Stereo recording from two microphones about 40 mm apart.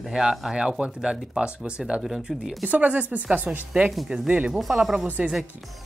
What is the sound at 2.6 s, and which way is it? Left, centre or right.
Speech, right.